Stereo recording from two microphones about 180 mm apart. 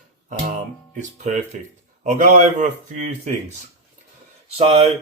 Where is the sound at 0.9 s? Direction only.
45° right (ahead or behind).